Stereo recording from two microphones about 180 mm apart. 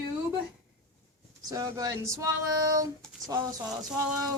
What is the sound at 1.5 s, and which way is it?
A woman's voice, 20° right (ahead or behind).